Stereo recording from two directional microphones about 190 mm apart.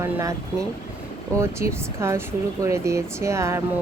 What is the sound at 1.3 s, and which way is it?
Speech, 15° right (ahead or behind).